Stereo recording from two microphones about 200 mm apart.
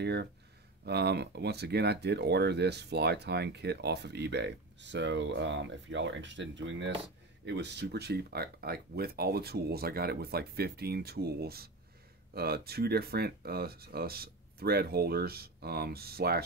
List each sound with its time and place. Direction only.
0.0 s speech: 55° right (ahead or behind)